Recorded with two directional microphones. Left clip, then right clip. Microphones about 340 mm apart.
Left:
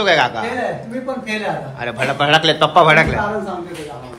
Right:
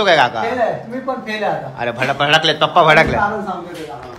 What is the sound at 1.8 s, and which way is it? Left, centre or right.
A man's voice, centre.